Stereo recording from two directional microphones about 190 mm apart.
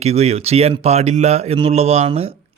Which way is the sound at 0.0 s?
35° right (ahead or behind).